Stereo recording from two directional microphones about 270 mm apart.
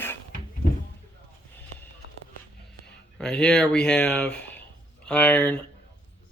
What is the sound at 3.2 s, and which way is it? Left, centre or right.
Speech, centre.